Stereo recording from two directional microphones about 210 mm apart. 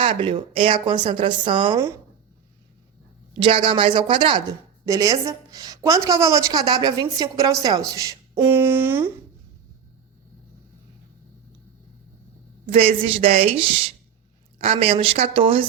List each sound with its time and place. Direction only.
0.0 s a woman's voice: 25° right (ahead or behind)
3.4 s a woman's voice: 25° right (ahead or behind)
12.6 s a woman's voice: 25° right (ahead or behind)